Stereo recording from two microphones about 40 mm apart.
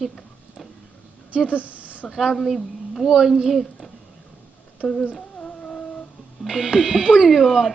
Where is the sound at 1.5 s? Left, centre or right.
Right.